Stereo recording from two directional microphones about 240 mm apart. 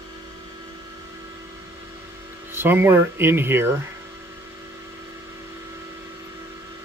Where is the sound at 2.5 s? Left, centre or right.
Centre.